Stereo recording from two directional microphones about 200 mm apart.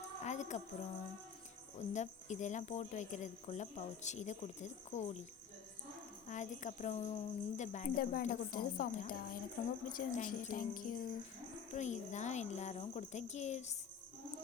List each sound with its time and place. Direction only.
0.2 s a woman's voice: 35° left (ahead or behind)
1.9 s speech: 35° left (ahead or behind)
6.2 s speech: 35° left (ahead or behind)